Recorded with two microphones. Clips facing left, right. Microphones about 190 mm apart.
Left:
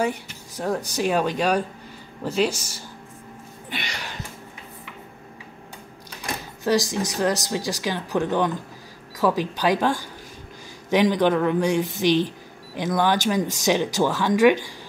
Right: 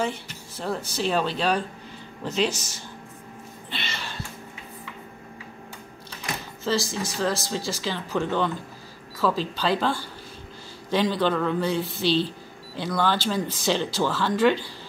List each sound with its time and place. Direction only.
0.0 s speech: 15° left (ahead or behind)
3.7 s a sound: 15° left (ahead or behind)
6.6 s speech: 15° left (ahead or behind)